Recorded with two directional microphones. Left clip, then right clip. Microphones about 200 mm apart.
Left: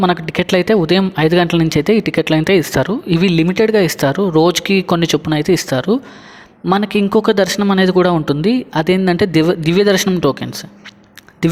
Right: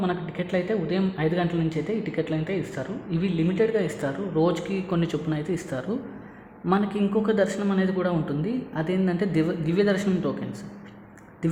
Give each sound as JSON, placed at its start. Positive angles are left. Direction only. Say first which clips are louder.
{"t": 0.0, "sound": "a man's voice", "louder": "left 13 dB", "side_deg": 45}